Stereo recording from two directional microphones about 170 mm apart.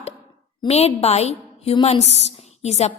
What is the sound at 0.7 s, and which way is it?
A woman's voice, 40° left (ahead or behind).